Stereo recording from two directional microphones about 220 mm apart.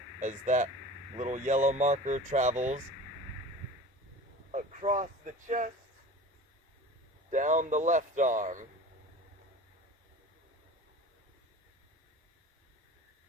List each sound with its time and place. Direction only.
0.2 s speech: 35° right (ahead or behind)
4.5 s vehicle: 35° right (ahead or behind)
5.5 s speech: 35° right (ahead or behind)
7.3 s speech: 35° right (ahead or behind)